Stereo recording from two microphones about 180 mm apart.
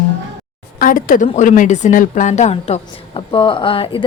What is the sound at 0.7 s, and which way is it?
A woman's voice, 50° left (ahead or behind).